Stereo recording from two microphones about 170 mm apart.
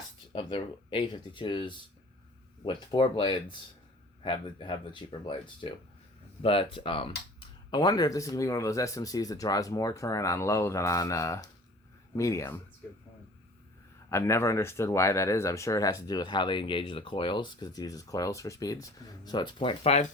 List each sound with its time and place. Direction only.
0.3 s speech: 30° left (ahead or behind)
14.1 s speech: 15° left (ahead or behind); by 20.1 s 40° left (ahead or behind)